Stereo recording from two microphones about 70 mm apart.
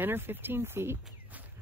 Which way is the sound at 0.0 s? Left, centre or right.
Right.